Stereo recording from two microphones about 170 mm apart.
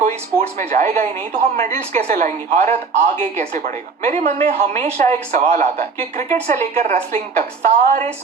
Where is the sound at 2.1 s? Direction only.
45° right (ahead or behind).